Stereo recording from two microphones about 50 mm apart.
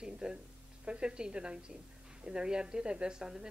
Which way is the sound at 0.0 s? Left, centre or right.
Centre.